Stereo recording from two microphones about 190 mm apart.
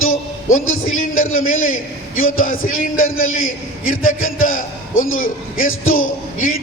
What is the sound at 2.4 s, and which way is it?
Speech, 45° left (ahead or behind).